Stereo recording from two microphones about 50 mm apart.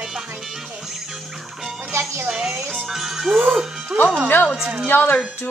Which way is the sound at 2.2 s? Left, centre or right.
Centre.